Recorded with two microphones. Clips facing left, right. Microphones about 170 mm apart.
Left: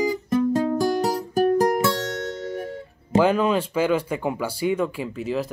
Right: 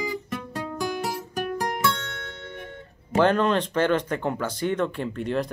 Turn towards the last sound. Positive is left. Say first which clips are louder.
# even
turn(degrees=5)  # may be behind; listen again after turning